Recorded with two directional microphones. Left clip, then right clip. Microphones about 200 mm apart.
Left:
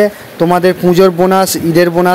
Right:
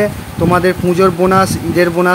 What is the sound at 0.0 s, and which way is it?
Speech, 25° left (ahead or behind).